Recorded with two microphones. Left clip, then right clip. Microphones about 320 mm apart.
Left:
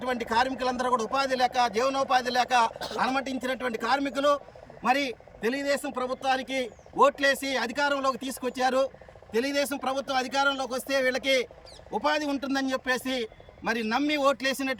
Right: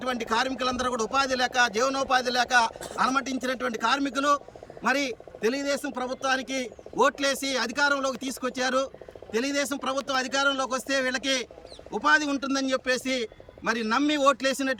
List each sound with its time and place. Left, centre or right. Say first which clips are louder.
0.0 s a man's voice: left 1 dB; centre